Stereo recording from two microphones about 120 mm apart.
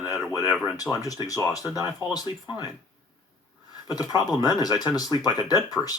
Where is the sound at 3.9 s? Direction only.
35° left (ahead or behind).